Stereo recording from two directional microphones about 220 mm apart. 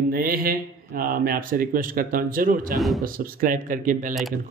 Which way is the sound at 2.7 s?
Centre (ahead or behind).